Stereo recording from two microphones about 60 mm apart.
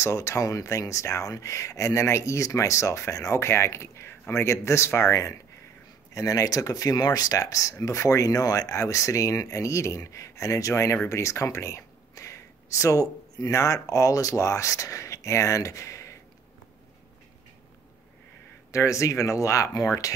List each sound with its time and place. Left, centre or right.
0.0 s speech: left
6.1 s speech: left
11.1 s a sound: left
13.4 s speech: left
18.7 s speech: left